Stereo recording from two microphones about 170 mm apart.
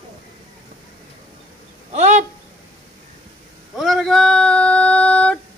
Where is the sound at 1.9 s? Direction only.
45° right (ahead or behind).